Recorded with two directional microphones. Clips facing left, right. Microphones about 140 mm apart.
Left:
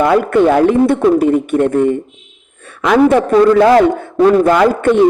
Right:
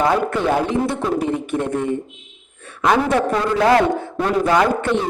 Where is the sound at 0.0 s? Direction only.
65° left (ahead or behind).